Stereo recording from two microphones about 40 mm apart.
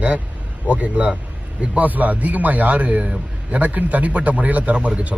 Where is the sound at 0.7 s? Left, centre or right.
Right.